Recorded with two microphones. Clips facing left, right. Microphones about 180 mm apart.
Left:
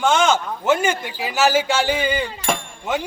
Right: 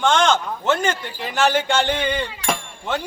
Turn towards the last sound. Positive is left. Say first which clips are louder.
# left 2 dB
turn(degrees=5)  # may be behind; listen again after turning